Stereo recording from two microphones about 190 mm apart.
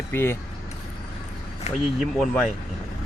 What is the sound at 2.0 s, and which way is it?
Speech, 5° left (ahead or behind).